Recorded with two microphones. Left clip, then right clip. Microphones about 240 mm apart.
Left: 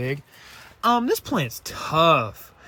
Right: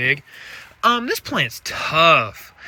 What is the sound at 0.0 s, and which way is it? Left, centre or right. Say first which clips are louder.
Speech: right 10 dB; centre.